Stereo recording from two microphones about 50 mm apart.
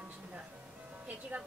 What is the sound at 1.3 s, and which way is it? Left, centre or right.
Speech, right.